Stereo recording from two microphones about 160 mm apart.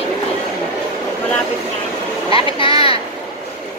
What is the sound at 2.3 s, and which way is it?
Speech, 35° left (ahead or behind).